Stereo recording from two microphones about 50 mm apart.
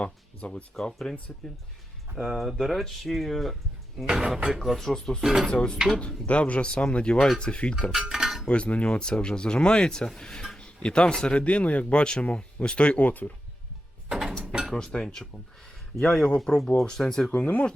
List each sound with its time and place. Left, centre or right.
0.0 s music: left
0.7 s speech: centre
4.0 s speech: centre
4.6 s speech: centre
4.9 s speech: centre
5.2 s speech: centre
5.5 s speech: centre
7.9 s cutlery: centre
8.4 s speech: left
14.1 s a sound: centre
14.7 s speech: centre
17.3 s speech: left